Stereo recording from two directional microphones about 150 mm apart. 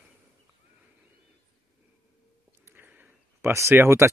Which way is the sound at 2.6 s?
10° right (ahead or behind).